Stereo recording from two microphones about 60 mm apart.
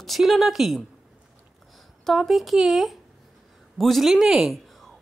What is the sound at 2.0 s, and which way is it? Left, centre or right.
A man's voice, centre.